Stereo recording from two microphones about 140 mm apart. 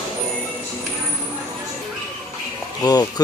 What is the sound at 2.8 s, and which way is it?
Speech, 25° left (ahead or behind).